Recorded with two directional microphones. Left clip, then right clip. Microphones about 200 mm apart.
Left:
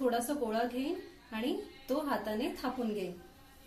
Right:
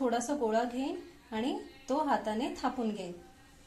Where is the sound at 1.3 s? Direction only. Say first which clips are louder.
Right 1 dB; 30° right (ahead or behind).